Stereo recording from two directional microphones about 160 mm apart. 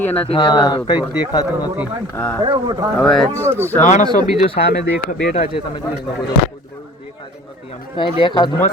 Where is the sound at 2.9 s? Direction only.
5° left (ahead or behind).